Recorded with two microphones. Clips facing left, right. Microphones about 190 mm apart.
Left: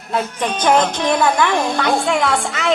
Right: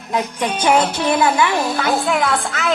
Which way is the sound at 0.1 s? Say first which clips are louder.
Even; 15° right (ahead or behind).